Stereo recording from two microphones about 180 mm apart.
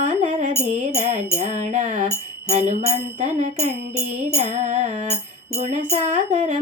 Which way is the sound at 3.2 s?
45° right (ahead or behind).